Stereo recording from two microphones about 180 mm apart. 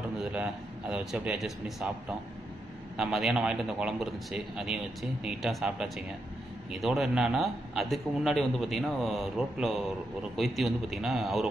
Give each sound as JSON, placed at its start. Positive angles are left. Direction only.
{"t": 0.2, "sound": "a man's voice", "side_deg": -5}